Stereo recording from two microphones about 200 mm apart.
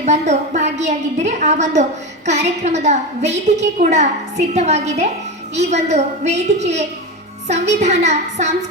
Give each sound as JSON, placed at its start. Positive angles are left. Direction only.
{"t": 0.0, "sound": "a woman's voice", "side_deg": -35}